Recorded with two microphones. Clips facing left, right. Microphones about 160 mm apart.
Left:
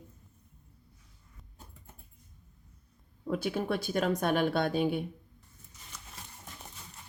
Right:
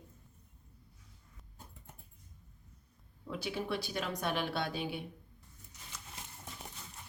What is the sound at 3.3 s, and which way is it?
Speech, 50° left (ahead or behind).